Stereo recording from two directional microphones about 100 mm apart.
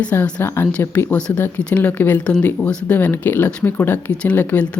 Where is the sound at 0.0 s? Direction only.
15° left (ahead or behind).